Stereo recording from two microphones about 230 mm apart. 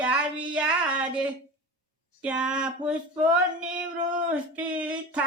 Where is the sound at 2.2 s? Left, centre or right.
Centre.